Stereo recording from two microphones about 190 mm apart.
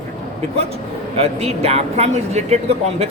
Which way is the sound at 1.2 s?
35° right (ahead or behind).